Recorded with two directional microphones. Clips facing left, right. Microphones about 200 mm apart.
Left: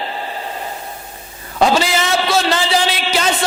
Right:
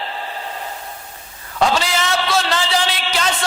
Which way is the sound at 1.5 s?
10° left (ahead or behind).